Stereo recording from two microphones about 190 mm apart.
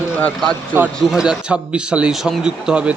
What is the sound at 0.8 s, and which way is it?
A man's voice, 5° right (ahead or behind).